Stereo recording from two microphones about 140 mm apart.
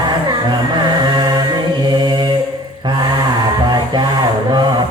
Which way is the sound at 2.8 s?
30° right (ahead or behind).